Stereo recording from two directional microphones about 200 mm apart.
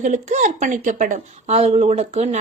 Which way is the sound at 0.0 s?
40° right (ahead or behind).